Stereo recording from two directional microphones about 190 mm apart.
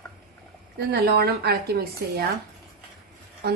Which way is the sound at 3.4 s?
55° right (ahead or behind).